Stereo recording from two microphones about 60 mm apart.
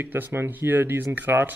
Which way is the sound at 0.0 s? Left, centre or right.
Right.